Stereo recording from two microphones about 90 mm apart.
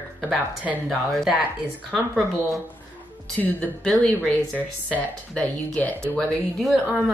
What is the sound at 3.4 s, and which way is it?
Speech, 15° left (ahead or behind).